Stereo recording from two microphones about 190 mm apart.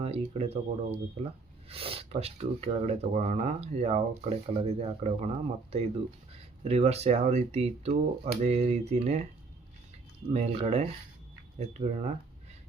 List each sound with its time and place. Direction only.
0.0 s speech: 30° right (ahead or behind)
10.3 s speech: 30° right (ahead or behind)